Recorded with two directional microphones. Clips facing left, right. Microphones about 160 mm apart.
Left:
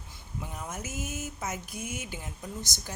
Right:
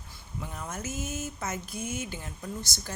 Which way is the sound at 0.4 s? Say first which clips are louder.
Right 2 dB; 15° left (ahead or behind).